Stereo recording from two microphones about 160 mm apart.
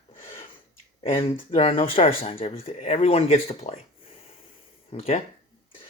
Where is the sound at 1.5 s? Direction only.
35° left (ahead or behind).